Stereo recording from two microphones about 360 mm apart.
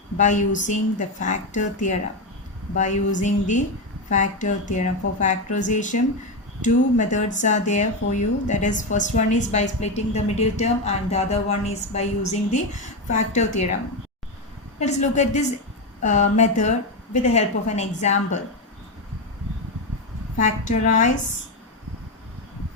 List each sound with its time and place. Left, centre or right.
0.2 s speech: left
14.8 s speech: centre
20.4 s speech: left